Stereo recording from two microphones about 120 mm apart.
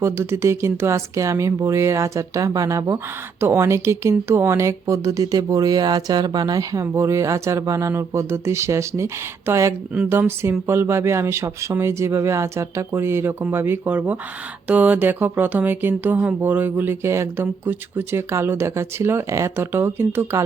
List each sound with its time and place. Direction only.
0.0 s speech: 20° right (ahead or behind)
9.9 s speech: 15° right (ahead or behind)